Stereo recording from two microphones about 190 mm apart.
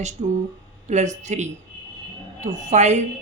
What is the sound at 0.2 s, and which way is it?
A man's voice, 35° right (ahead or behind).